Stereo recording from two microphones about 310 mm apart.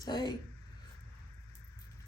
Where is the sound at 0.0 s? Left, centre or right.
Centre.